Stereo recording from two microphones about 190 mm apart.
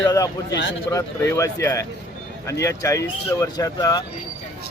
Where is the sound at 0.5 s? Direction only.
70° left (ahead or behind).